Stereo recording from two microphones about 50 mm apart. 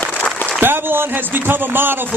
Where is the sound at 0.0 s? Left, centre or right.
Left.